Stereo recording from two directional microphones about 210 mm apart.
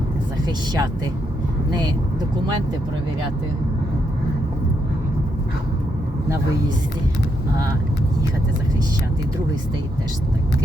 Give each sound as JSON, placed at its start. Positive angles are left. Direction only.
{"t": 0.4, "sound": "speech", "side_deg": -20}